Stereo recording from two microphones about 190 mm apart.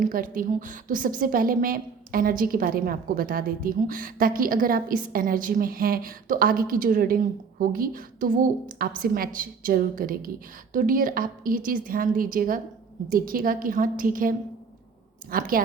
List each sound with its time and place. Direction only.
0.0 s a woman's voice: 45° right (ahead or behind)